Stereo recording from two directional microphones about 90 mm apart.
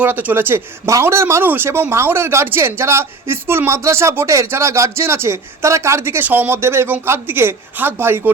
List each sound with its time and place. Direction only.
0.0 s speech: 20° right (ahead or behind)